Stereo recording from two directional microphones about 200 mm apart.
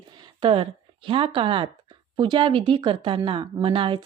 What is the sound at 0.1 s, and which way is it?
A woman's voice, 20° right (ahead or behind).